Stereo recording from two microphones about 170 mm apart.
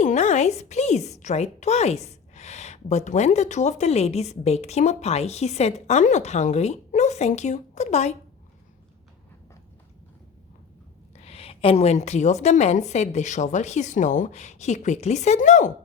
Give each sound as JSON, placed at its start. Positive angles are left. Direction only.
{"t": 0.0, "sound": "a woman's voice", "side_deg": 45}
{"t": 11.2, "sound": "a woman's voice", "side_deg": 35}